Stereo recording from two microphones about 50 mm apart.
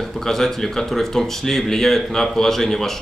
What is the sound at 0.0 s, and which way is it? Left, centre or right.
Speech, centre.